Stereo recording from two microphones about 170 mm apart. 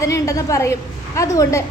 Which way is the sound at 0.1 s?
20° left (ahead or behind).